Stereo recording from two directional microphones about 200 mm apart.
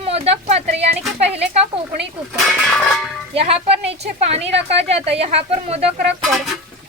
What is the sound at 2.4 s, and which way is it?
Speech, centre (ahead or behind).